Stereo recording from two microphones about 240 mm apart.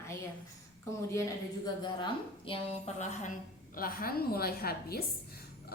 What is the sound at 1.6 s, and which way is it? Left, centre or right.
A woman's voice, centre.